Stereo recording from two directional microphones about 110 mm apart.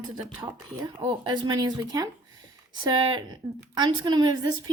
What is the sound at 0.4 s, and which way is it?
A woman's voice, 40° right (ahead or behind).